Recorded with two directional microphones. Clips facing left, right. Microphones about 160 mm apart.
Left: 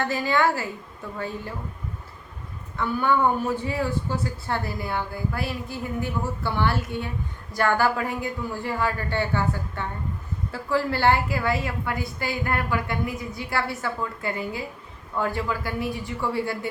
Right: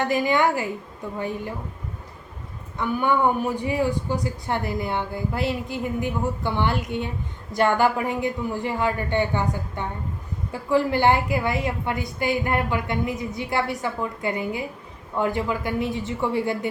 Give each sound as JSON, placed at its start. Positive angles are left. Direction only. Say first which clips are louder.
{"t": 0.0, "sound": "a woman's voice", "louder": "right 2 dB", "side_deg": -15}
{"t": 2.7, "sound": "speech", "louder": "right 1 dB", "side_deg": -15}